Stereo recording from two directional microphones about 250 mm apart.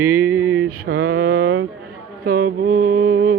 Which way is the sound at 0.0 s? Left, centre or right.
Centre.